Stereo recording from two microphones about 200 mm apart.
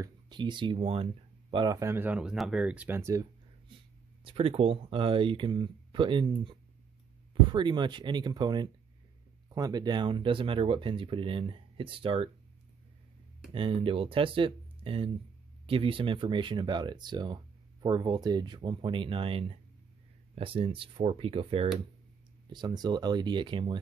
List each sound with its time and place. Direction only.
0.0 s speech: 20° right (ahead or behind)
4.2 s speech: 30° right (ahead or behind)
13.5 s speech: 25° right (ahead or behind)